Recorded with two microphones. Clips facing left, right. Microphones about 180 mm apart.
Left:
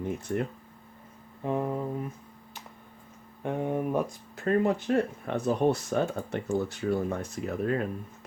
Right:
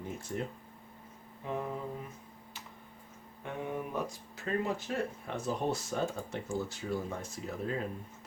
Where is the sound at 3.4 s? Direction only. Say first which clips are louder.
Left 9 dB; 50° left (ahead or behind).